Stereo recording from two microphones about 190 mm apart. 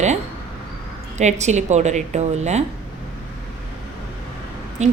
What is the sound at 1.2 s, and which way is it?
A woman's voice, 35° right (ahead or behind).